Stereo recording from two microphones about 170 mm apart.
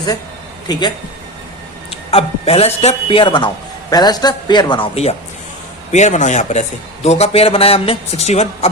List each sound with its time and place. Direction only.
0.7 s a man's voice: 25° left (ahead or behind)
5.9 s a man's voice: 45° left (ahead or behind)